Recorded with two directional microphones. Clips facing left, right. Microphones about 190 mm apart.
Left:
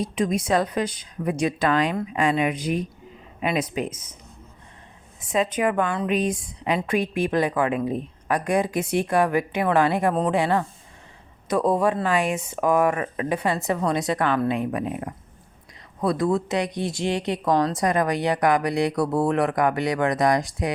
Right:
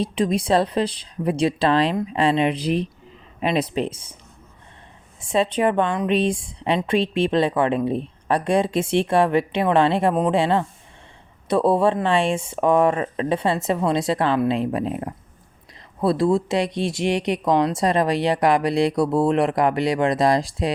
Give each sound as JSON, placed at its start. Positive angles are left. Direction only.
{"t": 0.0, "sound": "speech", "side_deg": -30}
{"t": 5.2, "sound": "speech", "side_deg": -30}